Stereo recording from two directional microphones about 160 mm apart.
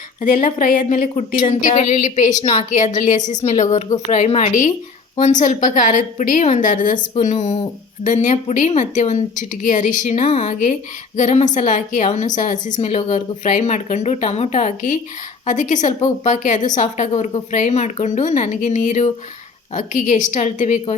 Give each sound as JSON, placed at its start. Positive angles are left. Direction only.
{"t": 0.4, "sound": "a woman's voice", "side_deg": 60}
{"t": 15.9, "sound": "a woman's voice", "side_deg": 30}
{"t": 16.2, "sound": "a woman's voice", "side_deg": 50}